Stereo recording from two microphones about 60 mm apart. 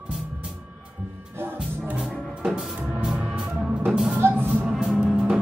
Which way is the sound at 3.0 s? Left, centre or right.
Centre.